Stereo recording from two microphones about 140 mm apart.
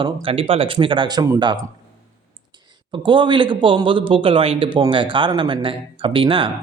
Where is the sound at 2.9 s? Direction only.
35° right (ahead or behind).